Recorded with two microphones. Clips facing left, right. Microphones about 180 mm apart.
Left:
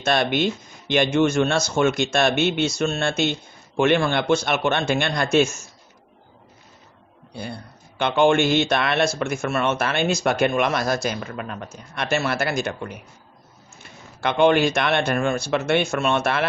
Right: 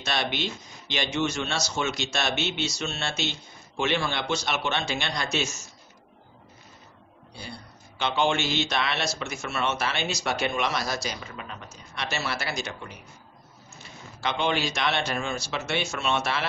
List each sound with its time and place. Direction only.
0.0 s a man's voice: 50° left (ahead or behind)
7.3 s a man's voice: 55° left (ahead or behind)
14.2 s speech: 55° left (ahead or behind)